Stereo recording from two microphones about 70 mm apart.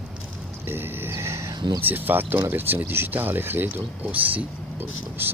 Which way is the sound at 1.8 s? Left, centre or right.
Right.